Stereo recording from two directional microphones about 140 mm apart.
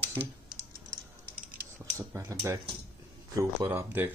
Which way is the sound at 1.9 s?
20° right (ahead or behind).